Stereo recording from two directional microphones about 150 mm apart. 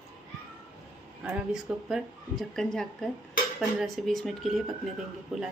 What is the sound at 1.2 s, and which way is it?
Speech, 5° right (ahead or behind).